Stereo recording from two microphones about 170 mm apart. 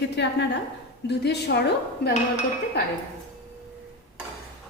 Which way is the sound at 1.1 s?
80° left.